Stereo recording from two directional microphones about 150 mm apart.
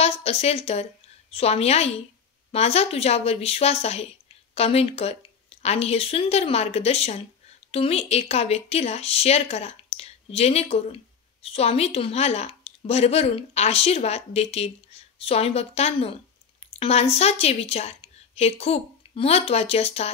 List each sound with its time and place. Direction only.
0.0 s a woman's voice: 45° left (ahead or behind)